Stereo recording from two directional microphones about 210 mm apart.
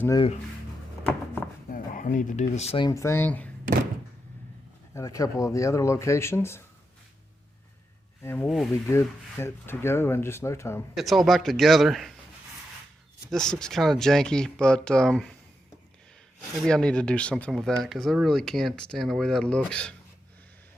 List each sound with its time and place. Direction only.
1.7 s speech: 40° left (ahead or behind); by 3.5 s 5° left (ahead or behind)
4.9 s speech: 15° left (ahead or behind)
8.2 s speech: 10° left (ahead or behind)
8.7 s speech: 10° left (ahead or behind)
10.9 s speech: centre (ahead or behind)
13.3 s speech: 5° left (ahead or behind)
16.6 s speech: 5° left (ahead or behind)